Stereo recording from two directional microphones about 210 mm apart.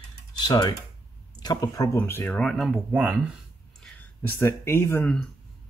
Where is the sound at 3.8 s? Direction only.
10° left (ahead or behind).